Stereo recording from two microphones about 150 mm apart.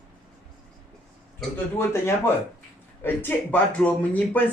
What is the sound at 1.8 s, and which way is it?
Speech, 15° left (ahead or behind).